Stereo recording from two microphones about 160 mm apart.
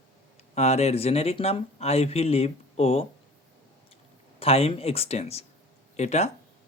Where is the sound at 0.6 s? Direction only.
40° left (ahead or behind).